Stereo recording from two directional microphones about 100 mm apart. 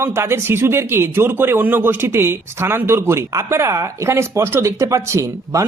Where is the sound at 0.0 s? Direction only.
25° right (ahead or behind).